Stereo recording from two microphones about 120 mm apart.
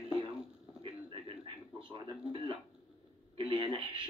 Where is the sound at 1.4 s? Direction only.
45° right (ahead or behind).